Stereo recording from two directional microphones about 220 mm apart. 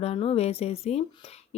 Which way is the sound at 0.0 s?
25° left (ahead or behind).